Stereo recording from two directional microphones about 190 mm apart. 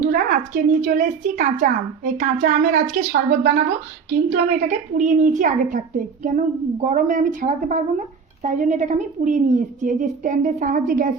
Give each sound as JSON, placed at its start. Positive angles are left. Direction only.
{"t": 0.0, "sound": "a woman's voice", "side_deg": -45}